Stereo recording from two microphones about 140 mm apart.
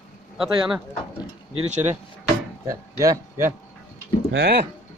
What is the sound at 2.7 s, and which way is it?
Speech, 20° right (ahead or behind).